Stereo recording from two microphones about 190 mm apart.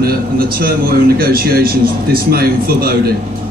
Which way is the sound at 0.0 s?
50° right (ahead or behind).